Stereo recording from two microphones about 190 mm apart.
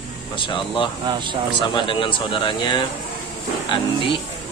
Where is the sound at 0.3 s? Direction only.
25° left (ahead or behind).